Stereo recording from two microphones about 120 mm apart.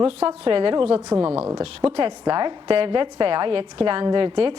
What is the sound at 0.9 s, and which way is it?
Speech, 25° right (ahead or behind).